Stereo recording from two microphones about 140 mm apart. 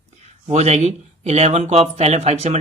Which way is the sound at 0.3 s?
50° right (ahead or behind).